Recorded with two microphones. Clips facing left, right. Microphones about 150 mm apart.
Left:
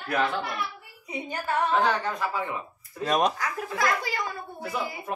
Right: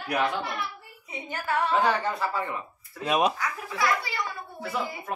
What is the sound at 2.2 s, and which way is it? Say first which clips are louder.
Speech: even; 5° left (ahead or behind).